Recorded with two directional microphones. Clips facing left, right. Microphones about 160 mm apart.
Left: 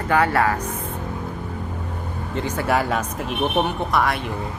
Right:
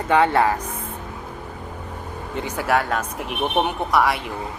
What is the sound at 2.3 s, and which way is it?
Speech, 15° right (ahead or behind).